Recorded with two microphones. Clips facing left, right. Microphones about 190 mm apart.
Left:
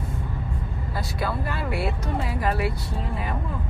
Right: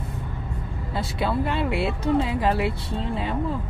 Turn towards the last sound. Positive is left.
turn(degrees=-25)  # may be behind; listen again after turning